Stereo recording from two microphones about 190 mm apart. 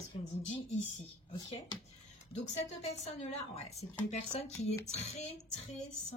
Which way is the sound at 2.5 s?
35° left (ahead or behind).